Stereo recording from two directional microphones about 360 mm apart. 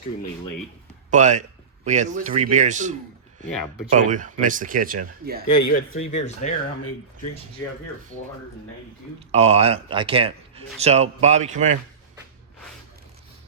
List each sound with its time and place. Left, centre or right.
1.1 s speech: centre
3.9 s speech: right
5.5 s speech: left
5.7 s speech: left
9.3 s speech: centre